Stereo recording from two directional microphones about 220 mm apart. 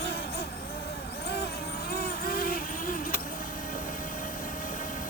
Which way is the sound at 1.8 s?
45° left (ahead or behind).